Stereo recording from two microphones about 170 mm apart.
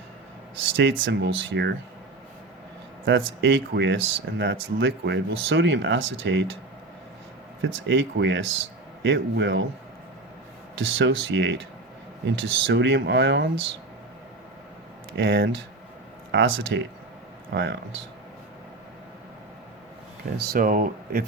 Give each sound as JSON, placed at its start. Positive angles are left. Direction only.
{"t": 0.8, "sound": "speech", "side_deg": -90}
{"t": 3.1, "sound": "speech", "side_deg": -90}
{"t": 7.6, "sound": "speech", "side_deg": -90}
{"t": 10.8, "sound": "speech", "side_deg": -90}
{"t": 15.1, "sound": "speech", "side_deg": -90}
{"t": 20.4, "sound": "speech", "side_deg": -60}